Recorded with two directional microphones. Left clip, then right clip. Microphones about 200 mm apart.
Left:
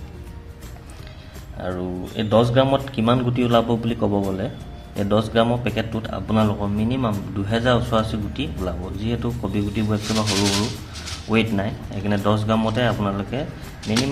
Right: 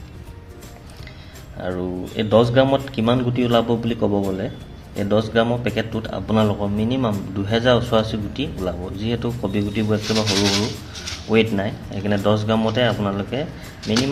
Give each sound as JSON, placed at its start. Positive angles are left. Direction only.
{"t": 1.5, "sound": "a man's voice", "side_deg": 0}